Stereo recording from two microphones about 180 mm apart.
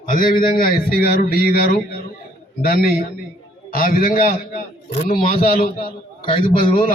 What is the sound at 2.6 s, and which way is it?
Speech, 55° left (ahead or behind).